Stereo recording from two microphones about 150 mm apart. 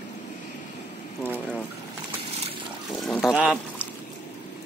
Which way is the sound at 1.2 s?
10° left (ahead or behind).